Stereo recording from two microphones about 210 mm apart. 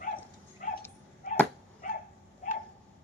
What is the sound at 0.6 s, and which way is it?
Dog, 40° left (ahead or behind).